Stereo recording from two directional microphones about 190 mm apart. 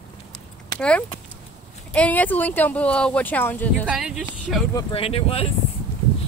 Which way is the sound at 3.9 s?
5° right (ahead or behind).